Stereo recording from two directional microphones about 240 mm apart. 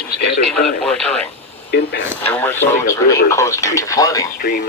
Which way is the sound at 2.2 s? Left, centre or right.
Centre.